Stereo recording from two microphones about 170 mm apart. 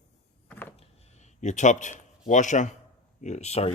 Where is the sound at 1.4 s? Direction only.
45° left (ahead or behind).